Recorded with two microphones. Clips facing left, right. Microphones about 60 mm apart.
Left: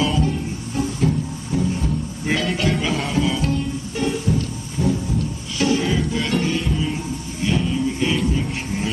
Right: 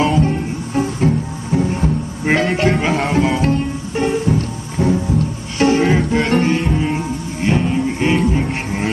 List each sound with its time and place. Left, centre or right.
0.0 s music: right
2.3 s music: right